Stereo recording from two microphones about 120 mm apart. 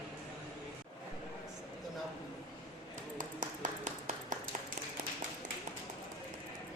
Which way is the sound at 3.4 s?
85° right.